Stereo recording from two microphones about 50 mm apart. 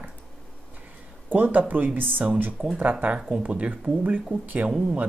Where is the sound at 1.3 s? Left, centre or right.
Right.